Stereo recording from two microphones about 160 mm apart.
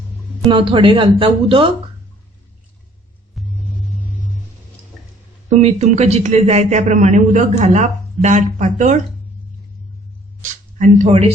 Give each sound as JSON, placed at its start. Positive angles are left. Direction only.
{"t": 0.4, "sound": "speech", "side_deg": -30}
{"t": 3.4, "sound": "music", "side_deg": 0}
{"t": 5.5, "sound": "speech", "side_deg": -40}
{"t": 10.8, "sound": "speech", "side_deg": -55}